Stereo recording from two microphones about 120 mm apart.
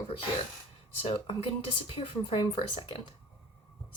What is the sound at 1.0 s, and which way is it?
Speech, 50° left (ahead or behind).